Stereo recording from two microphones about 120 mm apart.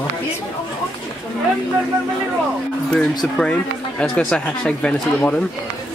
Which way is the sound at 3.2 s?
5° left (ahead or behind).